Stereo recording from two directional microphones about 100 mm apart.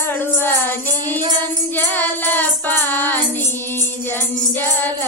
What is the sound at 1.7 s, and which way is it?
Music, 20° left (ahead or behind).